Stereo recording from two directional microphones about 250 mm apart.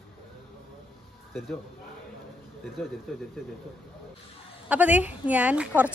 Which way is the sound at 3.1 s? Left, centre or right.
Centre.